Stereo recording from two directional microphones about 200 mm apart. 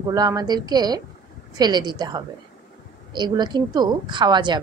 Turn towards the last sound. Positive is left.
turn(degrees=-20)  # may be behind; listen again after turning